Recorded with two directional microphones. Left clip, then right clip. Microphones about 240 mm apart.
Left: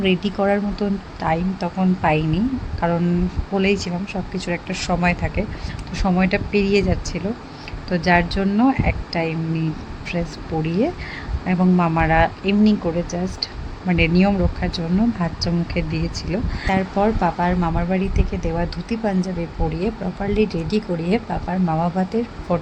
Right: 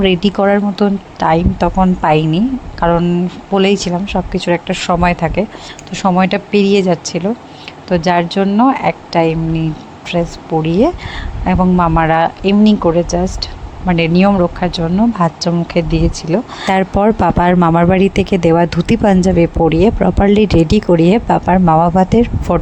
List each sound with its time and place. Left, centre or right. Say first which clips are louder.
0.0 s speech: right 8 dB; right
16.6 s speech: right 7 dB; right